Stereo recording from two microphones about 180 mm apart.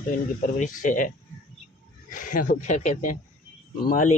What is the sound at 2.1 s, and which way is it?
Speech, 45° left (ahead or behind).